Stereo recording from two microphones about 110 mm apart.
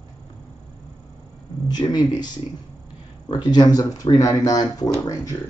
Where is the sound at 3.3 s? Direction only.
40° left (ahead or behind).